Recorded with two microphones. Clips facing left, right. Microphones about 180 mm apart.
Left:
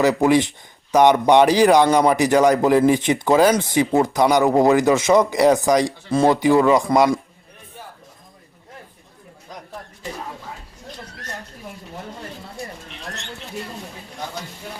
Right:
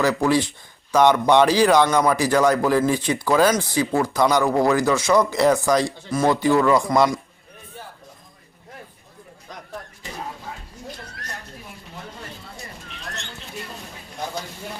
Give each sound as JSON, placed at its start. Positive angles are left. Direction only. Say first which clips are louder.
{"t": 0.0, "sound": "speech", "louder": "left 3 dB", "side_deg": 20}